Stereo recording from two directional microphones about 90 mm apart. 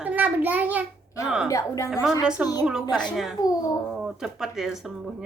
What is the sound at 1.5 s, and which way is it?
Speech, 35° left (ahead or behind).